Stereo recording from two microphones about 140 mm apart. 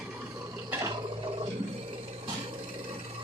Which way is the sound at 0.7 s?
20° right (ahead or behind).